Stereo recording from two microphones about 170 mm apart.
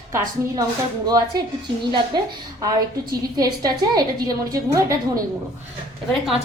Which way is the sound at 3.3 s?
20° right (ahead or behind).